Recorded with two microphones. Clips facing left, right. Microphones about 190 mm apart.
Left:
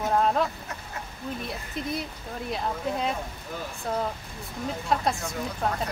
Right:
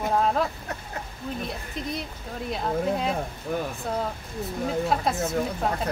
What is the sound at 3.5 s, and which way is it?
Speech, 60° right (ahead or behind).